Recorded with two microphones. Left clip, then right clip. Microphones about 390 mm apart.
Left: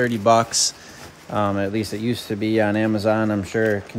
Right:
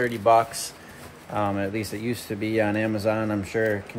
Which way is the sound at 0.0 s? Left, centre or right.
Left.